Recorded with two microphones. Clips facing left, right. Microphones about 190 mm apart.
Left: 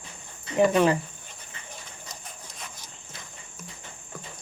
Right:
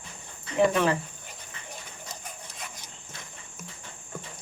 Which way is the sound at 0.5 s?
15° left (ahead or behind).